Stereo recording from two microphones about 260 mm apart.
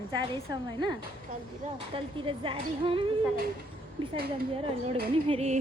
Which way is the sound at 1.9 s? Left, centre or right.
Centre.